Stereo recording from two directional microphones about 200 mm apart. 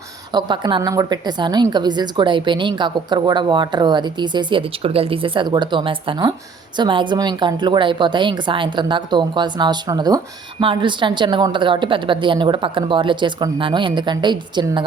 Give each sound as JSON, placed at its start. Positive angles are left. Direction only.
{"t": 0.3, "sound": "a woman's voice", "side_deg": -20}